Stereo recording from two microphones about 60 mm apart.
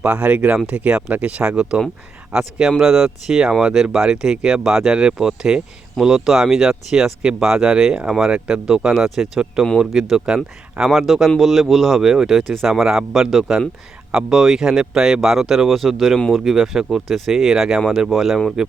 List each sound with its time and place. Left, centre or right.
0.0 s speech: right
10.9 s speech: centre